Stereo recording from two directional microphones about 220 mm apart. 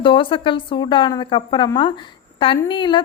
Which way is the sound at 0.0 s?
20° left (ahead or behind).